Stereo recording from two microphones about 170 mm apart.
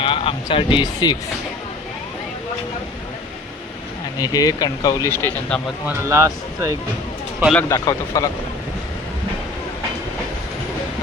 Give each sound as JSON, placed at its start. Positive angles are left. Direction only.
{"t": 0.0, "sound": "speech", "side_deg": 30}
{"t": 4.2, "sound": "speech", "side_deg": 20}
{"t": 5.8, "sound": "speech", "side_deg": -15}
{"t": 7.7, "sound": "speech", "side_deg": 20}